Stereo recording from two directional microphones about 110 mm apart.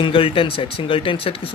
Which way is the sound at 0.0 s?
55° left (ahead or behind).